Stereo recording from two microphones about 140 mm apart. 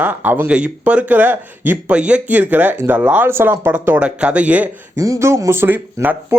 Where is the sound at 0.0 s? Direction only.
15° right (ahead or behind).